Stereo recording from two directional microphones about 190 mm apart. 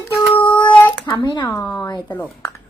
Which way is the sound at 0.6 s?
10° left (ahead or behind).